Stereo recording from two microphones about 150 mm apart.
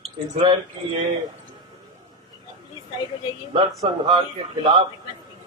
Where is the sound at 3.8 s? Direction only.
25° right (ahead or behind).